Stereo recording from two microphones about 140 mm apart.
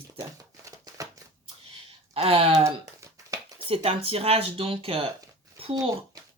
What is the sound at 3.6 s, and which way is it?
Speech, 45° right (ahead or behind).